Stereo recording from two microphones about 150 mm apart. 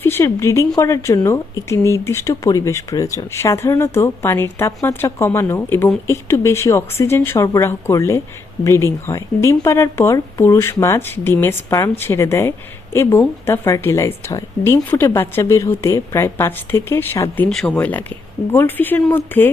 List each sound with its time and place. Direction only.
0.0 s speech: 15° left (ahead or behind)